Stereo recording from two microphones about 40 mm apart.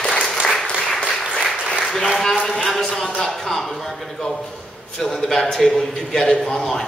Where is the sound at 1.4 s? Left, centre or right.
Centre.